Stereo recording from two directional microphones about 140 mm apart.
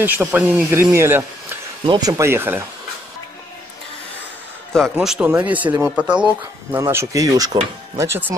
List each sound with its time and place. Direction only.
0.0 s speech: 15° right (ahead or behind)
1.9 s speech: 25° right (ahead or behind)
4.9 s speech: 5° right (ahead or behind)
6.8 s speech: 20° right (ahead or behind)